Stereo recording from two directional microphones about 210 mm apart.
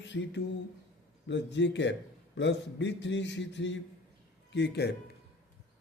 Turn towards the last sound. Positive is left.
turn(degrees=55)  # may be behind; listen again after turning